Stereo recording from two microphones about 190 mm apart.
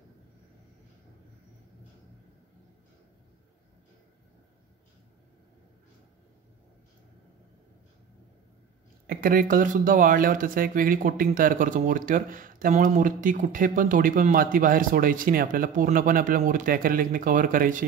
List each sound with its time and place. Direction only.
9.0 s speech: 50° right (ahead or behind)